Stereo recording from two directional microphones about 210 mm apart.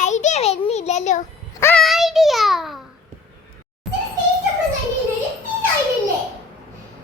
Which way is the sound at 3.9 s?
Centre (ahead or behind).